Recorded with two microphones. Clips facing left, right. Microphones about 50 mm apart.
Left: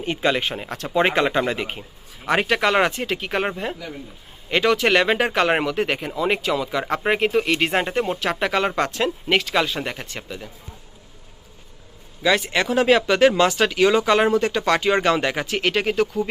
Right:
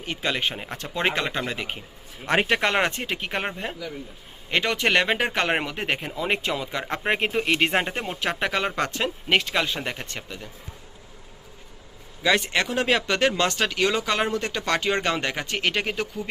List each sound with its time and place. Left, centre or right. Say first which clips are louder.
0.0 s speech: left 6 dB; left
0.3 s speech: left 3 dB; centre
0.9 s speech: left 7 dB; centre
1.5 s speech: left 3 dB; centre
2.3 s speech: left 3 dB; centre
6.7 s speech: left 3 dB; centre
12.2 s speech: left 2 dB; centre